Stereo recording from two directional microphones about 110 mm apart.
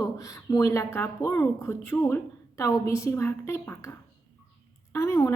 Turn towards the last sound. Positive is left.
turn(degrees=30)  # may be behind; listen again after turning